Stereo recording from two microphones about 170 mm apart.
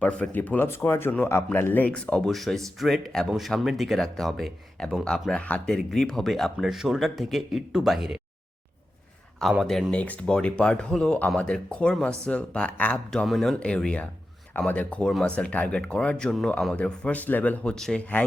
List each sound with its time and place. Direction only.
0.0 s speech: 5° left (ahead or behind)
9.4 s speech: centre (ahead or behind)